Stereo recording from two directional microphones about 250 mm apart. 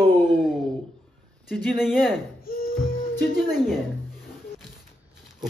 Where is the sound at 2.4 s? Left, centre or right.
Left.